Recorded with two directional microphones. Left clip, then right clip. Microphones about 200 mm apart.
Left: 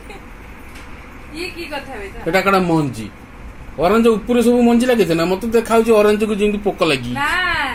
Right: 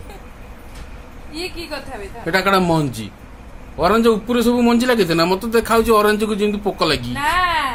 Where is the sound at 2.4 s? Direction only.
45° right (ahead or behind).